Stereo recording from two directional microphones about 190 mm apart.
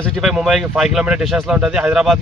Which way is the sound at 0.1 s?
Centre (ahead or behind).